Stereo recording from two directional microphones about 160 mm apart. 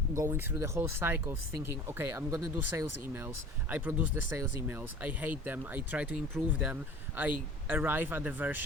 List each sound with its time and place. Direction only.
0.1 s speech: 20° right (ahead or behind)